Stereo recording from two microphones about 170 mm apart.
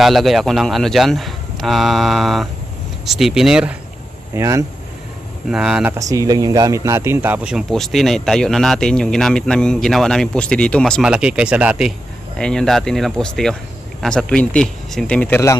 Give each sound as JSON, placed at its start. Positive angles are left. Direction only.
{"t": 0.0, "sound": "speech", "side_deg": 0}
{"t": 4.4, "sound": "speech", "side_deg": -20}
{"t": 5.5, "sound": "speech", "side_deg": -5}
{"t": 6.0, "sound": "speech", "side_deg": -20}